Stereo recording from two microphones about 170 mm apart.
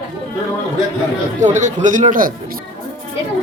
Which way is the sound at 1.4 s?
45° right (ahead or behind).